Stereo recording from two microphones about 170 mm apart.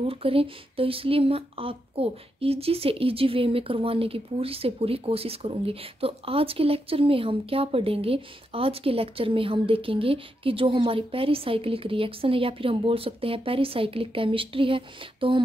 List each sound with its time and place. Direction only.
0.0 s speech: 35° right (ahead or behind)